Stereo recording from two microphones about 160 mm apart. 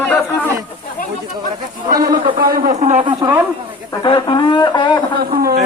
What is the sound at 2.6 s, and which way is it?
Speech, 45° right (ahead or behind).